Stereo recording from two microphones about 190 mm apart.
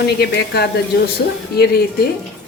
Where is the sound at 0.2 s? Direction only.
60° left (ahead or behind).